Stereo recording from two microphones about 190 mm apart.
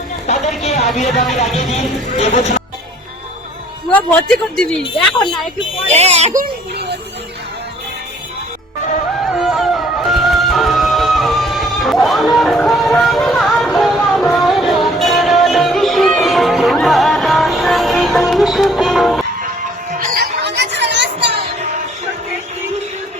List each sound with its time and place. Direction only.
0.3 s a sound: 35° left (ahead or behind)
0.9 s speech: 35° left (ahead or behind)
4.5 s speech: 5° left (ahead or behind)
5.9 s speech: 35° right (ahead or behind)
6.4 s a sound: 60° right (ahead or behind)
9.3 s music: centre (ahead or behind)
20.6 s music: 65° right (ahead or behind)